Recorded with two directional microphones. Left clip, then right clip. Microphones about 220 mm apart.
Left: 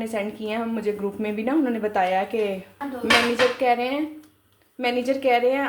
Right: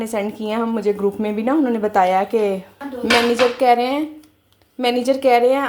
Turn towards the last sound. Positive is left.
turn(degrees=-30)  # may be behind; listen again after turning